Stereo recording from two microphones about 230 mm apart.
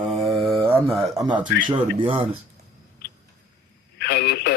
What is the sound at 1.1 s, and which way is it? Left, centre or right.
Speech, centre.